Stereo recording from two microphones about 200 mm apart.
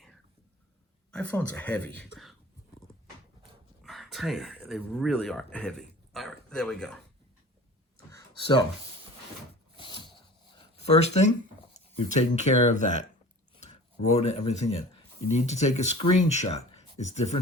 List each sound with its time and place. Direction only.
1.1 s speech: 5° left (ahead or behind)
3.8 s speech: centre (ahead or behind)
8.1 s a sound: 25° left (ahead or behind)
9.7 s zipper: 25° left (ahead or behind)
12.1 s speech: 35° left (ahead or behind)
16.7 s a sound: 35° left (ahead or behind)